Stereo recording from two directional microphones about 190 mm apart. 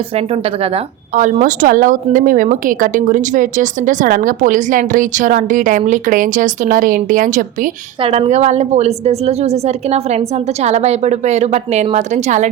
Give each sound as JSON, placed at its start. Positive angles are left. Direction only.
{"t": 0.2, "sound": "a woman's voice", "side_deg": -30}
{"t": 8.0, "sound": "a woman's voice", "side_deg": -30}